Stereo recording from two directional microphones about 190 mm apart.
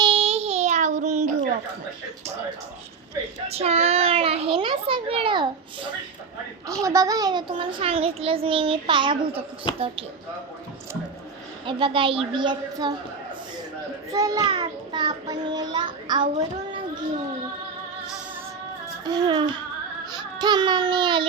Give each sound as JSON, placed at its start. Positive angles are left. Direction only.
{"t": 0.0, "sound": "child singing", "side_deg": -30}
{"t": 3.4, "sound": "a child's voice", "side_deg": -35}
{"t": 11.6, "sound": "a child's voice", "side_deg": -25}
{"t": 14.1, "sound": "a child's voice", "side_deg": -20}
{"t": 19.0, "sound": "a child's voice", "side_deg": -20}
{"t": 20.1, "sound": "baby cry", "side_deg": -20}